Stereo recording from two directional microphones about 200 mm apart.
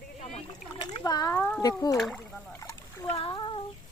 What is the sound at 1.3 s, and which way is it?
Speech, 5° left (ahead or behind).